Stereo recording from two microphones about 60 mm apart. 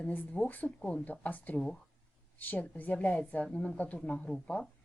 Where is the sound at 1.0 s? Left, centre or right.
Left.